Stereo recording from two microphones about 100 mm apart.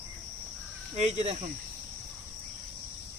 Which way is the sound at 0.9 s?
85° right.